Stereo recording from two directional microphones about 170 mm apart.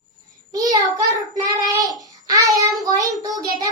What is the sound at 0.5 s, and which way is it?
Child singing, 20° right (ahead or behind).